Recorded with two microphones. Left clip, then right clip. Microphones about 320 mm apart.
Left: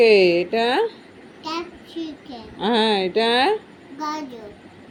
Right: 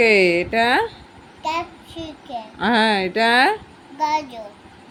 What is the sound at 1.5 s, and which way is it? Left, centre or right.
Speech, centre.